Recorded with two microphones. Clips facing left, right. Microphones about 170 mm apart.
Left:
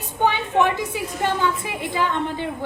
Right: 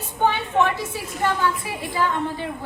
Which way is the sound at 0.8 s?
20° left (ahead or behind).